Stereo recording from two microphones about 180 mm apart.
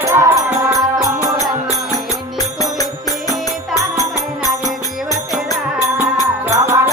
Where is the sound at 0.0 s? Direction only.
15° right (ahead or behind).